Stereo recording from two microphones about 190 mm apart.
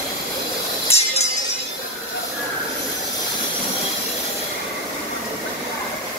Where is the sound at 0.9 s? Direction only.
30° left (ahead or behind).